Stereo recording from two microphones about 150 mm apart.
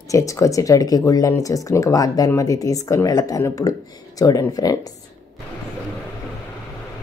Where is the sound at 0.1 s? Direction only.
20° left (ahead or behind).